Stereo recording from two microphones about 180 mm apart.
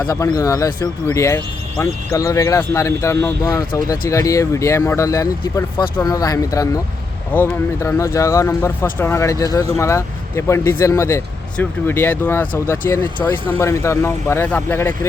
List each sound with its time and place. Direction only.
0.1 s speech: 15° left (ahead or behind)